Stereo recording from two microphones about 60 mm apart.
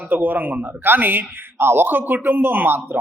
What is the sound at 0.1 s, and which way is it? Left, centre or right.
A man's voice, right.